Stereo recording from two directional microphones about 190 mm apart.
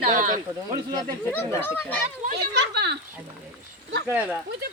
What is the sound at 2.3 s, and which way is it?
Speech, 60° right (ahead or behind).